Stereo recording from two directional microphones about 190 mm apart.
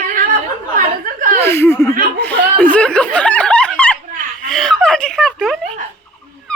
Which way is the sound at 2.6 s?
5° left (ahead or behind).